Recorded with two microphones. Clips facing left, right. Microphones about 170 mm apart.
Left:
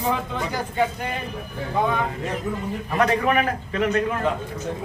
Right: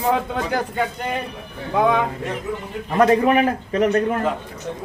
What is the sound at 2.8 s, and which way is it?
A man's voice, 30° right (ahead or behind).